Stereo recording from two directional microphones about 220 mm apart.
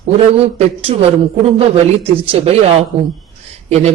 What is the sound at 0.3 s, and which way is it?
Speech, 25° right (ahead or behind).